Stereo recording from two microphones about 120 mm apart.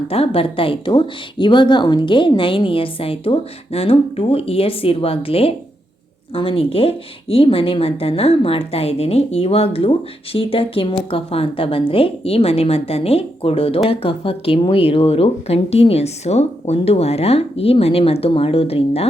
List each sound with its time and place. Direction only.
0.1 s speech: 50° left (ahead or behind)